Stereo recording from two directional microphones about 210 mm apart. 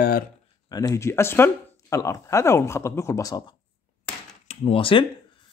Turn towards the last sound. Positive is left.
turn(degrees=25)  # may be behind; listen again after turning